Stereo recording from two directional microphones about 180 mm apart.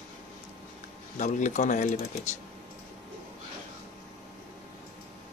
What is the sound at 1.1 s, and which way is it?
Speech, 40° left (ahead or behind).